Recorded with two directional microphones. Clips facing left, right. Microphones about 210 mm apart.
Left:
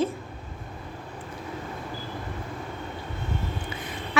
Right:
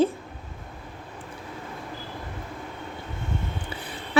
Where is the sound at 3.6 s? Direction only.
35° right (ahead or behind).